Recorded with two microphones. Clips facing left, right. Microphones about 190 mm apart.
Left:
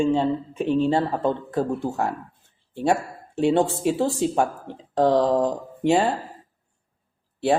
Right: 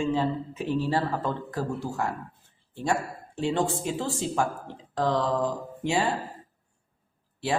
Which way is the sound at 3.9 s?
40° left (ahead or behind).